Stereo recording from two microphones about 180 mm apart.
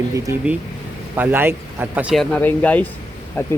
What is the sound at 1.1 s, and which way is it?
Speech, 10° right (ahead or behind).